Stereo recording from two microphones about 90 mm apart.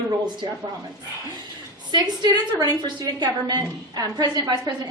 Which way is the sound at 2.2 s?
50° right (ahead or behind).